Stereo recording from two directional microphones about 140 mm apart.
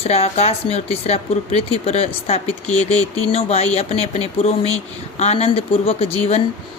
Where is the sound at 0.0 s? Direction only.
45° left (ahead or behind).